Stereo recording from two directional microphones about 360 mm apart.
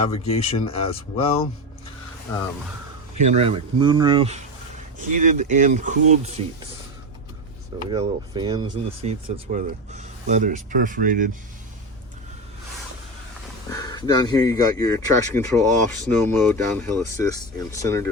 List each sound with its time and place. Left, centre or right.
0.0 s speech: centre
3.3 s speech: centre
7.9 s speech: centre
13.7 s speech: centre